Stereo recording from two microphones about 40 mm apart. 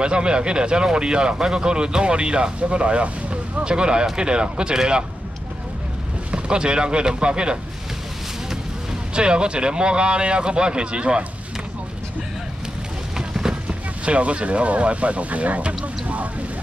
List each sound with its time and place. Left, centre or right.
0.0 s speech: right
6.3 s speech: right
9.1 s speech: right
13.3 s vehicle: centre
13.7 s speech: right